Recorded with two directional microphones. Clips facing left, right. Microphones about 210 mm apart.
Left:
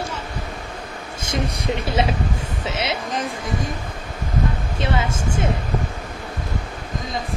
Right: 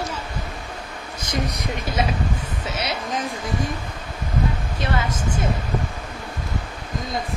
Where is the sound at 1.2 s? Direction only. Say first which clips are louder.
Left 1 dB; 25° left (ahead or behind).